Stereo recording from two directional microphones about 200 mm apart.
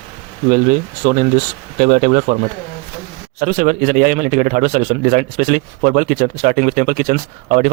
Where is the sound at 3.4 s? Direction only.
40° right (ahead or behind).